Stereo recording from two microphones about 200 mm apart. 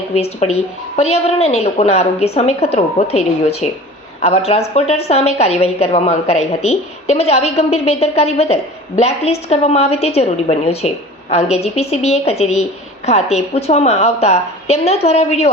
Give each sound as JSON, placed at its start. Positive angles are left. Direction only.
{"t": 0.1, "sound": "a woman's voice", "side_deg": 30}